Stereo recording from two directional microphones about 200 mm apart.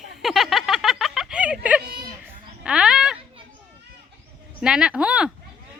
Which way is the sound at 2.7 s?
5° right (ahead or behind).